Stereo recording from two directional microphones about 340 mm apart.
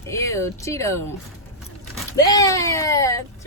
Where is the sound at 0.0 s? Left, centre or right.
Centre.